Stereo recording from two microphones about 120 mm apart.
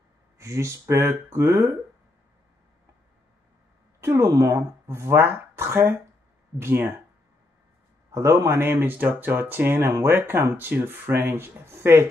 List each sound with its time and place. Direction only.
0.4 s speech: 25° right (ahead or behind)
4.0 s speech: 20° right (ahead or behind)
8.1 s speech: 25° right (ahead or behind)